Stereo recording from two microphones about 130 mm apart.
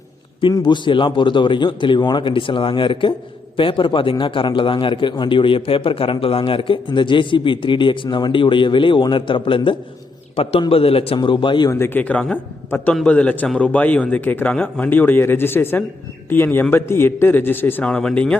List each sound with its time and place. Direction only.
0.4 s a man's voice: 35° left (ahead or behind)
11.7 s a man's voice: 15° left (ahead or behind)